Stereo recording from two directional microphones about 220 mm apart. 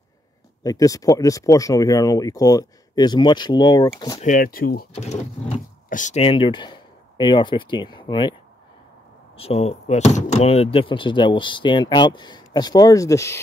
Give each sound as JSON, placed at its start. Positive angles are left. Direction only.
{"t": 0.7, "sound": "speech", "side_deg": 15}
{"t": 4.2, "sound": "speech", "side_deg": 40}
{"t": 4.9, "sound": "speech", "side_deg": 30}
{"t": 9.4, "sound": "speech", "side_deg": 30}